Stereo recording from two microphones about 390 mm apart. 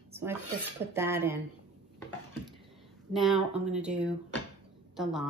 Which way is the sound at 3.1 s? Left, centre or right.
Centre.